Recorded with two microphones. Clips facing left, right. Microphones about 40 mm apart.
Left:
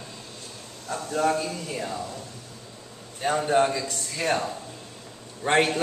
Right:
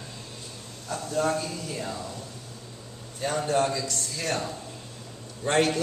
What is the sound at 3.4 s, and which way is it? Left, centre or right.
A man's voice, left.